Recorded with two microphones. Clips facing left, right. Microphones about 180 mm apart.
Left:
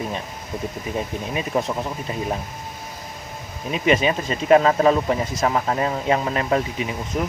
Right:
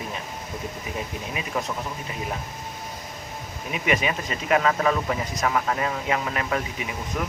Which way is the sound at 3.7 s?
30° left (ahead or behind).